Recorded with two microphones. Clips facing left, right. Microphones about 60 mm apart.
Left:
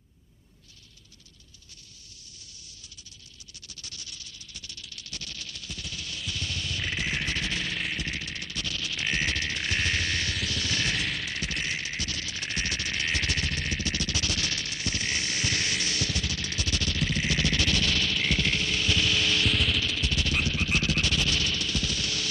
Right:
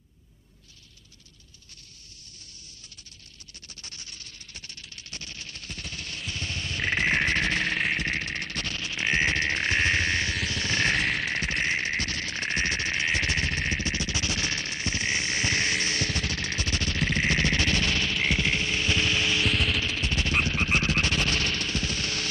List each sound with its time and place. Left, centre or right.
3.6 s music: right
11.0 s music: centre
11.2 s music: right
19.4 s music: centre
19.8 s music: right